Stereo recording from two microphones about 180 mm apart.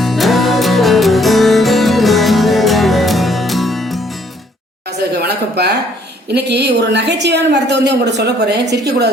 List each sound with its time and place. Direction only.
0.0 s music: centre (ahead or behind)
5.1 s a sound: 65° right (ahead or behind)
6.2 s a woman's voice: 65° right (ahead or behind)